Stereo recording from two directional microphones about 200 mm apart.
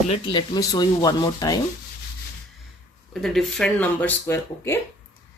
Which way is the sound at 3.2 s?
Centre (ahead or behind).